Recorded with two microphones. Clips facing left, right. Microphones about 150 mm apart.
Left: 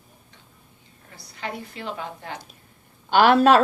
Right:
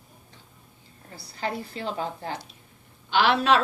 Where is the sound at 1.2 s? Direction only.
35° right (ahead or behind).